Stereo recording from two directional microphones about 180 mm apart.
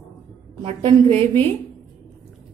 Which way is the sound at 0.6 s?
35° right (ahead or behind).